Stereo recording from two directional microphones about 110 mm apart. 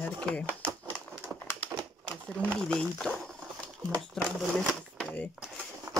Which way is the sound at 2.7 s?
10° left (ahead or behind).